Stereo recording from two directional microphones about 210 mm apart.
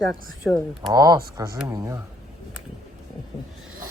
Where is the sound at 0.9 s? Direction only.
20° right (ahead or behind).